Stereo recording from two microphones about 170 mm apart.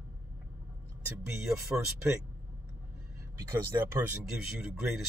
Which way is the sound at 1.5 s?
15° right (ahead or behind).